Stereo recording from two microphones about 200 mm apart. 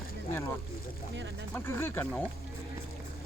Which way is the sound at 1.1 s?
65° right (ahead or behind).